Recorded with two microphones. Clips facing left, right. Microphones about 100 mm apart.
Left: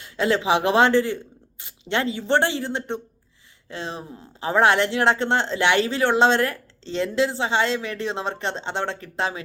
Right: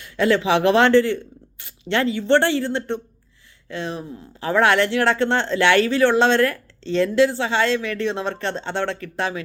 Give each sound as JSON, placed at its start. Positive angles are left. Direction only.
{"t": 0.0, "sound": "speech", "side_deg": 25}